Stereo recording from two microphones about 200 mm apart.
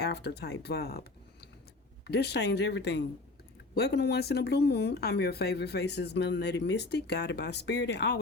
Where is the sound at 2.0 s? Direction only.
55° left (ahead or behind).